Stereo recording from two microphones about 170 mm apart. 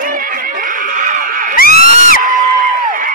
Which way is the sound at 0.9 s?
50° right (ahead or behind).